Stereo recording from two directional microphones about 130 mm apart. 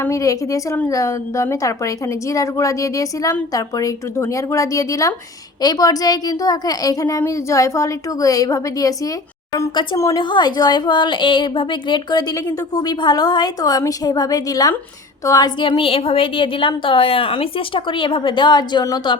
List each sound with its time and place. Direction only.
0.0 s a woman's voice: 25° left (ahead or behind)
15.6 s a woman's voice: 40° left (ahead or behind)